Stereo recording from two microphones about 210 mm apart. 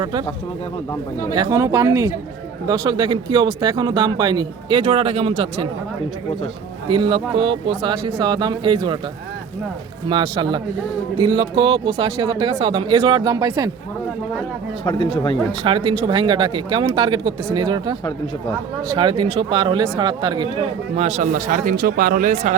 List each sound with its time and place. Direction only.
0.0 s speech: 20° right (ahead or behind)
1.4 s speech: 15° right (ahead or behind)
6.9 s speech: 20° right (ahead or behind)
10.1 s speech: 20° right (ahead or behind)
15.6 s speech: 25° right (ahead or behind)
18.9 s speech: 25° right (ahead or behind); by 22.5 s 40° right (ahead or behind)